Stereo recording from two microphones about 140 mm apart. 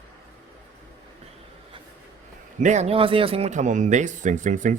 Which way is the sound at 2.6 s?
55° right (ahead or behind).